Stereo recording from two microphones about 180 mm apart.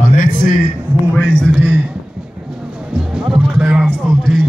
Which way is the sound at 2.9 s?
5° right (ahead or behind).